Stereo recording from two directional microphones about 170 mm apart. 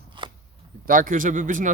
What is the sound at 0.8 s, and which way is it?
Speech, 50° right (ahead or behind).